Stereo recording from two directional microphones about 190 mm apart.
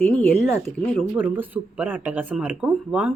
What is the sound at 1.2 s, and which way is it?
Speech, 10° right (ahead or behind).